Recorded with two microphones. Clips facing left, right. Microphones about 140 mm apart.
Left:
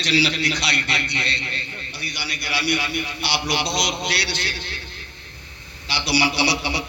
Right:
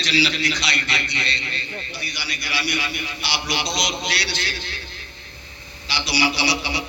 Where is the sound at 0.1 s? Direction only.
55° left (ahead or behind).